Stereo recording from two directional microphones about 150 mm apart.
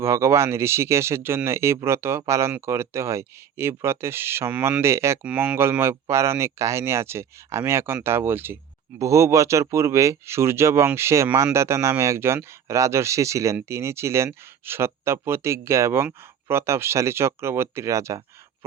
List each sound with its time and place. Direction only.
0.0 s speech: 15° right (ahead or behind)